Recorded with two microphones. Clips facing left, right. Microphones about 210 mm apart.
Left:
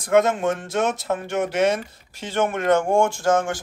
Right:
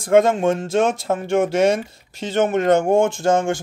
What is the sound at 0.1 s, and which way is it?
Speech, 25° right (ahead or behind).